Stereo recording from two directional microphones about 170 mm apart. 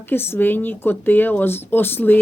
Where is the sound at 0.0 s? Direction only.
10° left (ahead or behind).